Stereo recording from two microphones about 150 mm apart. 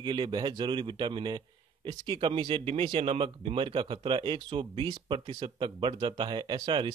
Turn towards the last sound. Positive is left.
turn(degrees=-30)  # may be behind; listen again after turning